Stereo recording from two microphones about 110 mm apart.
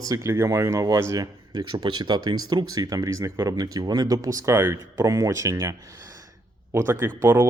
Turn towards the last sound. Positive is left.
turn(degrees=-20)  # may be behind; listen again after turning